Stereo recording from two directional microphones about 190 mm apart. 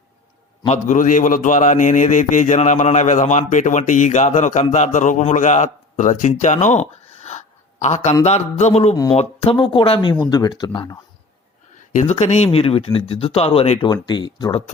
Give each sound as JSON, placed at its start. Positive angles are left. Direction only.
{"t": 0.7, "sound": "a man's voice", "side_deg": 40}
{"t": 7.3, "sound": "a sound", "side_deg": 35}
{"t": 8.2, "sound": "a man's voice", "side_deg": 35}
{"t": 11.9, "sound": "speech", "side_deg": 40}